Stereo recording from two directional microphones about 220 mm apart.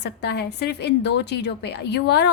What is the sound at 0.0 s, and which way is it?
A woman's voice, 50° left (ahead or behind).